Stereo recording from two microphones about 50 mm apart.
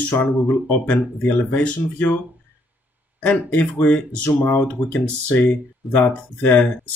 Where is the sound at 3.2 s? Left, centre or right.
Left.